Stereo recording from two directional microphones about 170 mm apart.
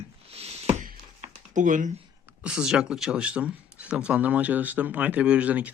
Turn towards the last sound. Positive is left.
turn(degrees=-10)  # may be behind; listen again after turning